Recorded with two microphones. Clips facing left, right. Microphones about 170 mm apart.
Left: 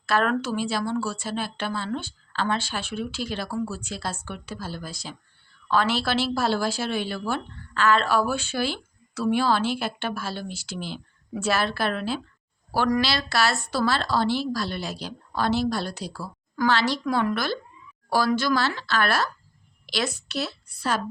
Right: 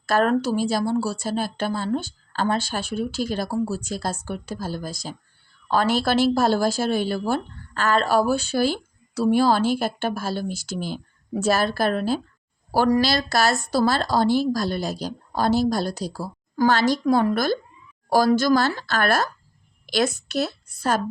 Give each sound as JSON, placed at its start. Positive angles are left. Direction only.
{"t": 0.0, "sound": "a woman's voice", "side_deg": -40}